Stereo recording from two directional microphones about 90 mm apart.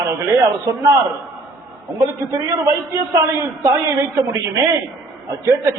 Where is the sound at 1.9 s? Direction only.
35° right (ahead or behind).